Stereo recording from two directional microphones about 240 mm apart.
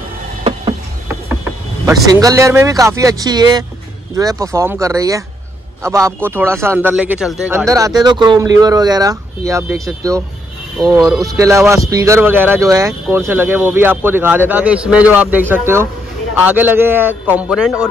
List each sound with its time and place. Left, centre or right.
0.4 s a sound: right
1.9 s a man's voice: centre
10.8 s speech: centre